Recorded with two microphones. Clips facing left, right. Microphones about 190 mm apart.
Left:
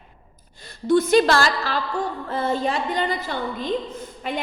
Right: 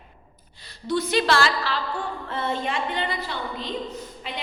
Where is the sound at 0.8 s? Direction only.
50° left (ahead or behind).